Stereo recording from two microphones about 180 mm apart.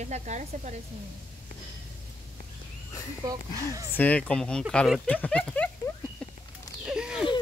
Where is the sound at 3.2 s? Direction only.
20° right (ahead or behind).